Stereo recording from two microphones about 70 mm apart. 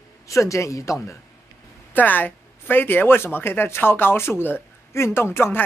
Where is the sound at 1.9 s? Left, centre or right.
Left.